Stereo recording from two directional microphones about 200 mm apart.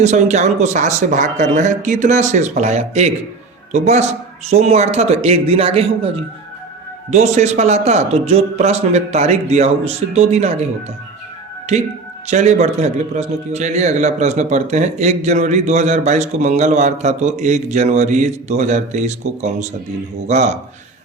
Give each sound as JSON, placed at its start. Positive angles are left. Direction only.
{"t": 0.0, "sound": "a man's voice", "side_deg": -35}
{"t": 11.7, "sound": "a man's voice", "side_deg": -35}